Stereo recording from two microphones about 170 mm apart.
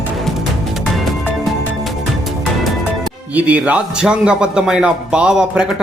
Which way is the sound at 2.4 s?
Centre (ahead or behind).